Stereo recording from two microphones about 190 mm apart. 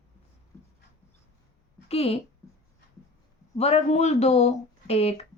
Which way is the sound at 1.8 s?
30° left (ahead or behind).